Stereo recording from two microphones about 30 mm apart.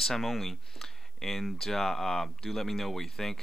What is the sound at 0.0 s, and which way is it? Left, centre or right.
Speech, centre.